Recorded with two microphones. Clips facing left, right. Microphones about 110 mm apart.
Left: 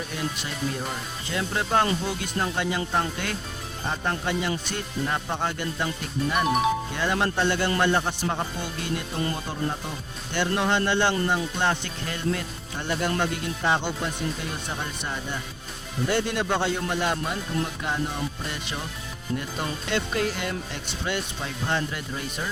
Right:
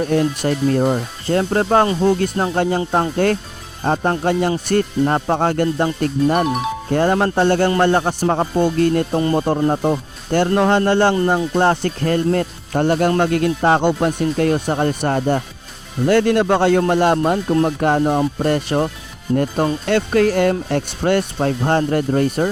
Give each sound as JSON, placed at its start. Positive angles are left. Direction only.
{"t": 0.0, "sound": "speech", "side_deg": -55}